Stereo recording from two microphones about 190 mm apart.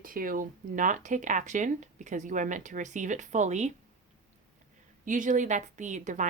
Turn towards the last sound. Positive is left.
turn(degrees=-40)  # may be behind; listen again after turning